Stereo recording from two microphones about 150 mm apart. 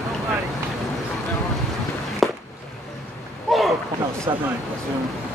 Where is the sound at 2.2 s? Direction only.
Centre (ahead or behind).